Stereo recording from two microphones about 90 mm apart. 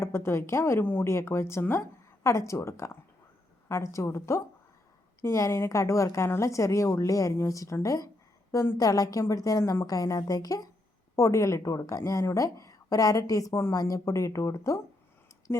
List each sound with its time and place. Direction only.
0.0 s a woman's voice: 30° left (ahead or behind)
15.5 s a woman's voice: 25° left (ahead or behind)